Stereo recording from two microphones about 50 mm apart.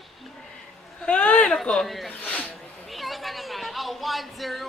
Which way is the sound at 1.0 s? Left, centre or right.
Left.